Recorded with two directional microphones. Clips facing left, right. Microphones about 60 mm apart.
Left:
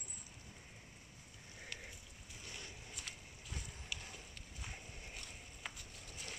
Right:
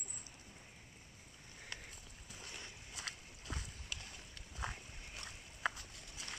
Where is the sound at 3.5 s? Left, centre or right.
Right.